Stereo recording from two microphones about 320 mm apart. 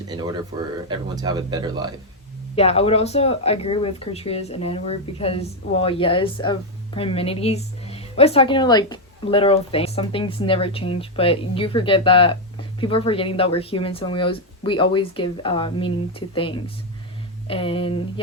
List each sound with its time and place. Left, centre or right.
0.1 s speech: centre
2.6 s speech: centre